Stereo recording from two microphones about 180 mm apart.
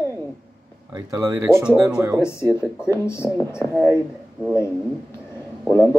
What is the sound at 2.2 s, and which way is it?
Speech, 15° left (ahead or behind).